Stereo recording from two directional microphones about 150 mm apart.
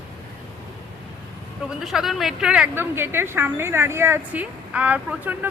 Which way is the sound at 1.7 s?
Centre (ahead or behind).